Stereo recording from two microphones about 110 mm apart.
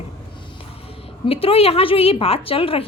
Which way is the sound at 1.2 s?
60° left (ahead or behind).